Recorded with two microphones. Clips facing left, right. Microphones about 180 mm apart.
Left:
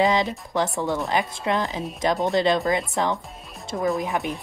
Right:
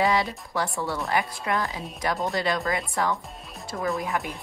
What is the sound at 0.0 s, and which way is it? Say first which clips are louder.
Speech: left 3 dB; 20° left (ahead or behind).